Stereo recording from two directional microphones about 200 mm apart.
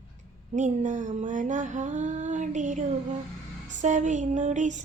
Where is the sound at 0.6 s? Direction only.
40° right (ahead or behind).